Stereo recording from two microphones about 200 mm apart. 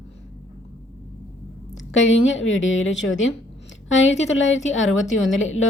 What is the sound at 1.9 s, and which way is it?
A woman's voice, 70° left (ahead or behind).